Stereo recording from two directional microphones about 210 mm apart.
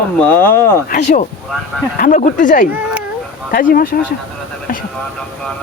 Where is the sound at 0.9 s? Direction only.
35° left (ahead or behind).